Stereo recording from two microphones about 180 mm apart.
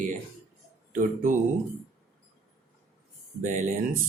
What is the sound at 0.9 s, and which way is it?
Speech, 45° right (ahead or behind).